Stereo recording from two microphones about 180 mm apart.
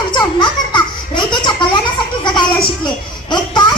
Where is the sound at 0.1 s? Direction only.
25° left (ahead or behind).